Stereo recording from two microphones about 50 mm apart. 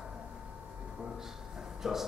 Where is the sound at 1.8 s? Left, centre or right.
Centre.